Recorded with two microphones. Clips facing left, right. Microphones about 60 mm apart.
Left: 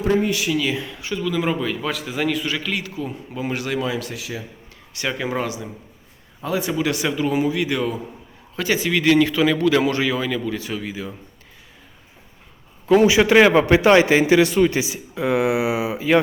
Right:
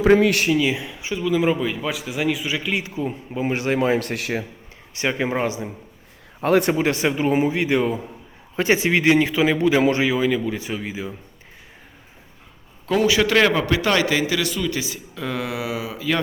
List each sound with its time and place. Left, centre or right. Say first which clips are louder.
0.0 s speech: right 5 dB; right
0.5 s speech: right 2 dB; centre; by 4.1 s right
4.1 s a man's voice: right 5 dB; right
4.9 s a man's voice: right 2 dB; right
6.4 s a man's voice: right 6 dB; right
6.7 s a man's voice: right 1 dB; right; by 11.1 s centre
12.8 s a man's voice: left 4 dB; centre; by 14.8 s left
14.8 s a man's voice: left 5 dB; centre